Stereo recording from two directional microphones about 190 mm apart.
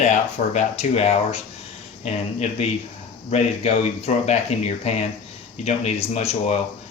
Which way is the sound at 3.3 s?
35° left (ahead or behind).